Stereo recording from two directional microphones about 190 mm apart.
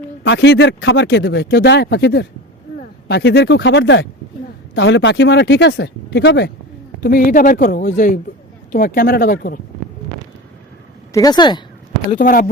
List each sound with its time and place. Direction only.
0.3 s speech: 70° left (ahead or behind)
7.0 s speech: 50° left (ahead or behind)
11.1 s speech: 20° left (ahead or behind)
12.1 s speech: 45° left (ahead or behind)